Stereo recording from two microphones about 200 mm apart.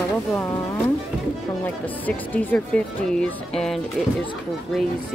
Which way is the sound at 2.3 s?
10° left (ahead or behind).